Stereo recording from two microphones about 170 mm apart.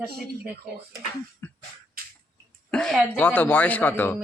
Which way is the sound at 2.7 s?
5° left (ahead or behind).